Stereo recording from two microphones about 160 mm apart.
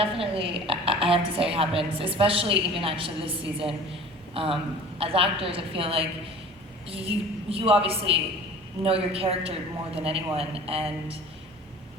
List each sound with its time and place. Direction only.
0.0 s a woman's voice: 35° right (ahead or behind)